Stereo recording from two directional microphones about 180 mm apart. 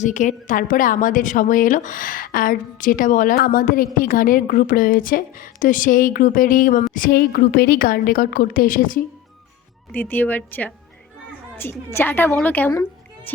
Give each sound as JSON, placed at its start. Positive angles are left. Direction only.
{"t": 0.0, "sound": "a woman's voice", "side_deg": 45}
{"t": 9.9, "sound": "a woman's voice", "side_deg": 10}